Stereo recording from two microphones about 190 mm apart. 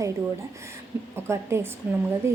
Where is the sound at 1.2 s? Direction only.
15° right (ahead or behind).